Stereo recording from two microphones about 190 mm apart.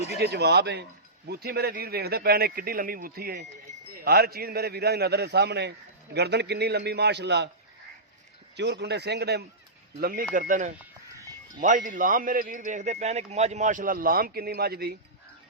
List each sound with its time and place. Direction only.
0.2 s speech: 60° right (ahead or behind)
8.5 s a man's voice: 65° right (ahead or behind)